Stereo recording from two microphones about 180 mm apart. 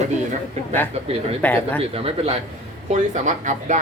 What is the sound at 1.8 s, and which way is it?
Speech, 35° right (ahead or behind).